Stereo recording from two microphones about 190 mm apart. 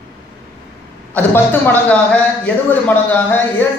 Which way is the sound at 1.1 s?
10° left (ahead or behind).